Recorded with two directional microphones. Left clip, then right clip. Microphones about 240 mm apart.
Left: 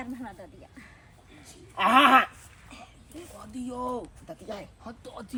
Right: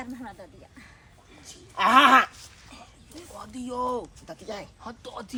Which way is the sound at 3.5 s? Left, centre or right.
Centre.